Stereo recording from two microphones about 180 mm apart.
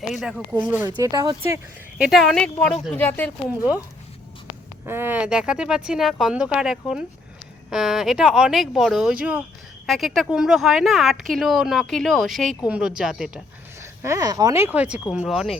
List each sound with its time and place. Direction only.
0.1 s a woman's voice: centre (ahead or behind)
0.9 s speech: 20° right (ahead or behind)
2.0 s a woman's voice: centre (ahead or behind)
4.9 s a woman's voice: 10° right (ahead or behind)
14.0 s a woman's voice: 20° right (ahead or behind); by 15.5 s centre (ahead or behind)